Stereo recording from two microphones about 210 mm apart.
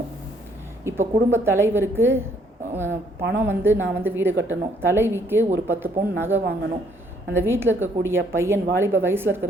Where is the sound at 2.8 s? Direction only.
55° right (ahead or behind).